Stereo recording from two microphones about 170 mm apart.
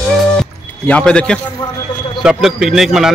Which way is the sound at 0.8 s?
5° left (ahead or behind).